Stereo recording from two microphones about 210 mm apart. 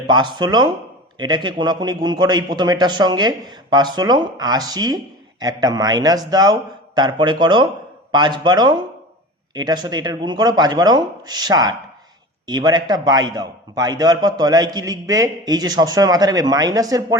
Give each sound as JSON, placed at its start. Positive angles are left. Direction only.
{"t": 0.1, "sound": "a man's voice", "side_deg": -20}